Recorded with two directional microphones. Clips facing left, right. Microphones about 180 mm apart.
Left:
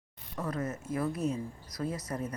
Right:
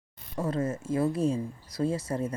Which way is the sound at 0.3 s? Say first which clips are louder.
Right 5 dB; 25° right (ahead or behind).